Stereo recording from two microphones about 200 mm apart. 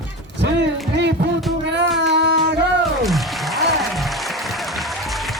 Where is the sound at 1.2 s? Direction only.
65° right (ahead or behind).